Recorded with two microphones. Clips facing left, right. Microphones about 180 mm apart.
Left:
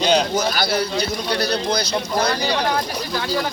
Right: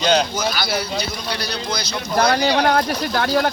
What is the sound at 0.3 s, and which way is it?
Speech, 50° left (ahead or behind).